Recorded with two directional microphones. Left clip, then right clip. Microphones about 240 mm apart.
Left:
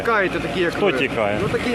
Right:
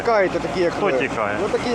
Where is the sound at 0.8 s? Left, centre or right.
Left.